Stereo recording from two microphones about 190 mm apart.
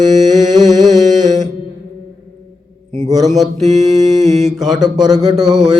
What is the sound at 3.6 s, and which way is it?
Mantra, 35° right (ahead or behind).